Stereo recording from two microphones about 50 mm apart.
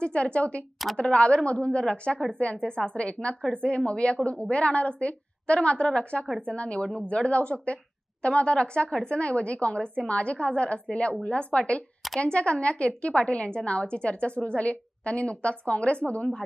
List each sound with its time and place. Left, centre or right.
0.0 s a woman's voice: left